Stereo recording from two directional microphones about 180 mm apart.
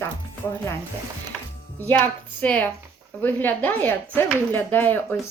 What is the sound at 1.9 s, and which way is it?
Speech, 10° left (ahead or behind).